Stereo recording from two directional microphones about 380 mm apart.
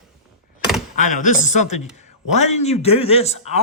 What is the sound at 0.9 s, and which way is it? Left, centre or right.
Speech, centre.